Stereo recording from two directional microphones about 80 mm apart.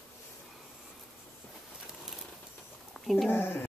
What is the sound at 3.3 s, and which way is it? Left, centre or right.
Speech, left.